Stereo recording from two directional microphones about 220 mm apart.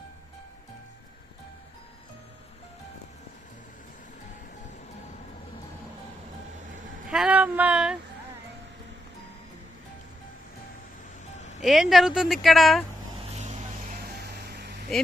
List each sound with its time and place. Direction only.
7.1 s speech: 5° right (ahead or behind)
11.6 s speech: centre (ahead or behind)
13.3 s vehicle: 30° right (ahead or behind)
14.0 s a sound: 45° right (ahead or behind)